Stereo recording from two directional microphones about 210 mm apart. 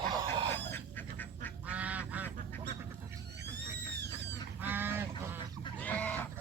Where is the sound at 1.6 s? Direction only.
5° right (ahead or behind).